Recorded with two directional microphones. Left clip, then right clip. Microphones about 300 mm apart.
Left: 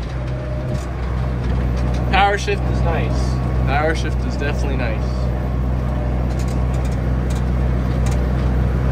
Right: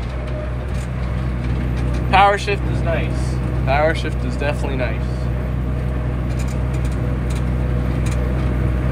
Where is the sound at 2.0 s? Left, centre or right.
Centre.